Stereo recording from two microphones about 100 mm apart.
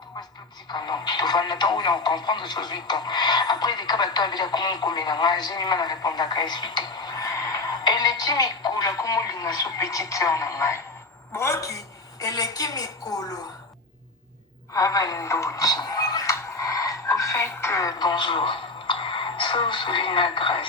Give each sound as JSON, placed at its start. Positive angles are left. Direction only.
{"t": 0.7, "sound": "a woman's voice", "side_deg": 45}
{"t": 14.7, "sound": "music", "side_deg": 35}